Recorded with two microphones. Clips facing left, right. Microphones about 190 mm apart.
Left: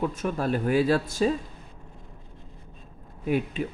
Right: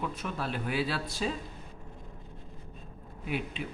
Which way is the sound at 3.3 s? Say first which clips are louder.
Left 9 dB; 45° left (ahead or behind).